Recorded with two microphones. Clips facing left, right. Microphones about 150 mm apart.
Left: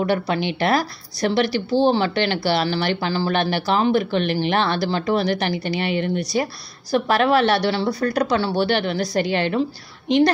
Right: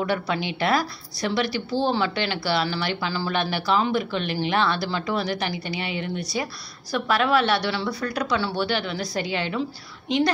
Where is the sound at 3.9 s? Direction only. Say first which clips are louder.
Left 5 dB; 60° left (ahead or behind).